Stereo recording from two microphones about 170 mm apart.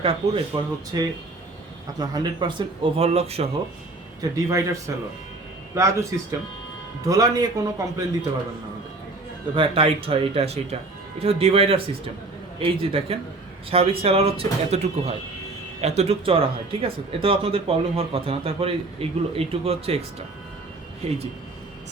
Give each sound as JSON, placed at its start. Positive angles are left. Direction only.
{"t": 0.0, "sound": "a man's voice", "side_deg": -30}
{"t": 4.2, "sound": "a man's voice", "side_deg": -20}
{"t": 7.1, "sound": "a man's voice", "side_deg": -20}
{"t": 9.6, "sound": "speech", "side_deg": -35}